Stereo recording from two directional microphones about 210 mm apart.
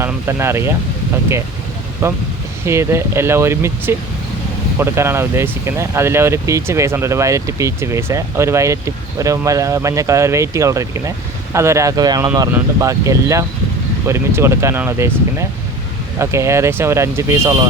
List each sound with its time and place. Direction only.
0.0 s speech: 10° right (ahead or behind)
2.0 s speech: 10° right (ahead or behind)